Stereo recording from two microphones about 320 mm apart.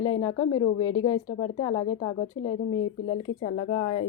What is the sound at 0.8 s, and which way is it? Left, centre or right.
Speech, left.